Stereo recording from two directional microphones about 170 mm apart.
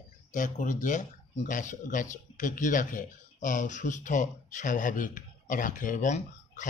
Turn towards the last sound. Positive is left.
turn(degrees=45)  # may be behind; listen again after turning